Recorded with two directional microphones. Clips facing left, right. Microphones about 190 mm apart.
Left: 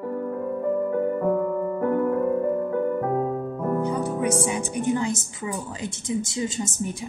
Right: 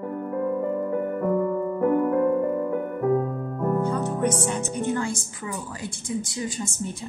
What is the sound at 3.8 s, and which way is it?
A woman's voice, 10° left (ahead or behind).